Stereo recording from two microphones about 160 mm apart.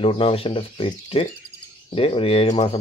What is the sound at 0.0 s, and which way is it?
Speech, 35° left (ahead or behind).